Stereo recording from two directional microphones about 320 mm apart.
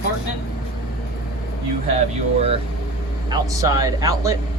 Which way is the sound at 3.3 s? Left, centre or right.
Centre.